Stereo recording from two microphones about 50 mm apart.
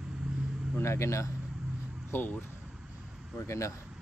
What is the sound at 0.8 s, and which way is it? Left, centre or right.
Speech, left.